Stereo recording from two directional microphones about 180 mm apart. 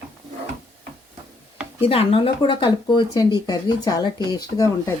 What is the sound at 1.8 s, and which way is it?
Speech, 30° left (ahead or behind).